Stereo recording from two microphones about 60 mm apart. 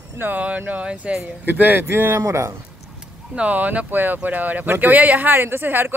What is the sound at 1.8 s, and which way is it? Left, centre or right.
Speech, right.